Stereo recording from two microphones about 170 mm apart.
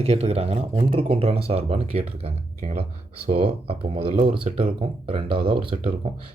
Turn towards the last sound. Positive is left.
turn(degrees=-30)  # may be behind; listen again after turning